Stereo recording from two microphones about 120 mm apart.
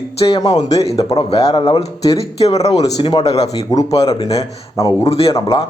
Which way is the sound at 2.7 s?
30° left (ahead or behind).